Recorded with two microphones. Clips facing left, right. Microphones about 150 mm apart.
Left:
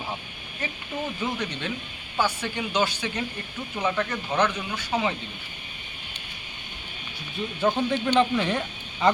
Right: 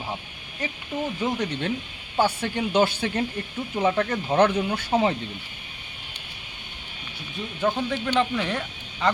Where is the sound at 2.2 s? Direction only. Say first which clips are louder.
Right 3 dB; 55° right (ahead or behind).